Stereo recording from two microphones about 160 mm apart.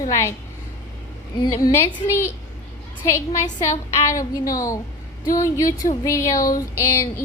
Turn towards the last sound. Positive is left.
turn(degrees=20)  # may be behind; listen again after turning